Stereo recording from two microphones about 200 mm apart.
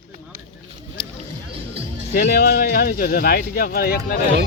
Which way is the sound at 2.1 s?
50° left (ahead or behind).